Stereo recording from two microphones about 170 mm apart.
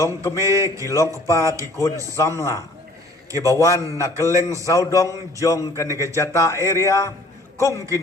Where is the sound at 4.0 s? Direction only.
20° left (ahead or behind).